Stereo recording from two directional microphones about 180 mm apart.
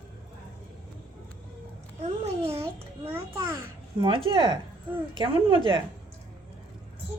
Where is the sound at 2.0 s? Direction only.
35° right (ahead or behind).